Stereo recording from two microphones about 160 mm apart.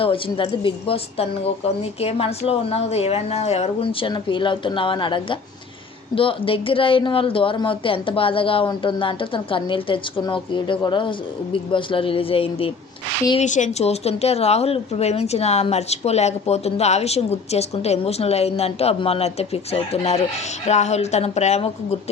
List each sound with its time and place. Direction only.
0.0 s a woman's voice: 35° left (ahead or behind)
13.4 s a woman's voice: 50° left (ahead or behind)